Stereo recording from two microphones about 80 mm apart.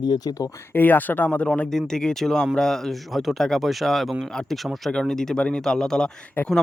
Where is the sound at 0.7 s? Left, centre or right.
Left.